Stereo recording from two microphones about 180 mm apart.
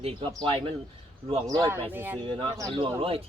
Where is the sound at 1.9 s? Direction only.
10° right (ahead or behind).